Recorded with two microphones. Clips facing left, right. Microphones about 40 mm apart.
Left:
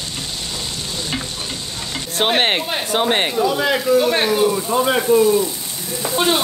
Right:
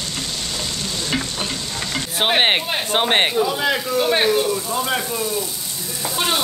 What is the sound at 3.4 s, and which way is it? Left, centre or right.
Speech, centre.